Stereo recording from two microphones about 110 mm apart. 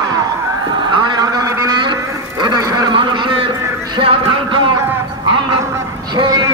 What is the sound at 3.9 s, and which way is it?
Music, 50° right (ahead or behind).